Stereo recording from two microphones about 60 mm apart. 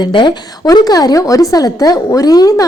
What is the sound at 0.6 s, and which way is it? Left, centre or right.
A woman's voice, left.